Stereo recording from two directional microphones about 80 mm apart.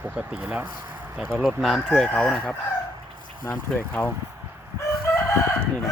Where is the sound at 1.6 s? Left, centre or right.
Centre.